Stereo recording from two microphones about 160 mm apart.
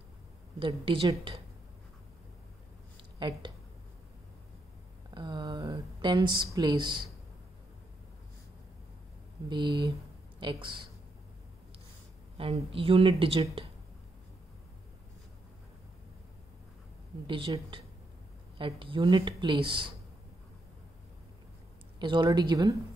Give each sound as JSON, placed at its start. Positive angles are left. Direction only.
{"t": 0.6, "sound": "speech", "side_deg": -35}
{"t": 3.2, "sound": "speech", "side_deg": -30}
{"t": 5.1, "sound": "speech", "side_deg": -30}
{"t": 10.4, "sound": "speech", "side_deg": -30}
{"t": 12.4, "sound": "speech", "side_deg": -35}
{"t": 17.3, "sound": "speech", "side_deg": -30}
{"t": 22.0, "sound": "speech", "side_deg": -30}